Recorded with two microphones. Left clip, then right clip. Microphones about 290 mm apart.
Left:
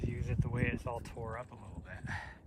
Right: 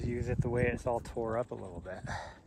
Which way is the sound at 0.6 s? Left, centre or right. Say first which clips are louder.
Right 4 dB; centre.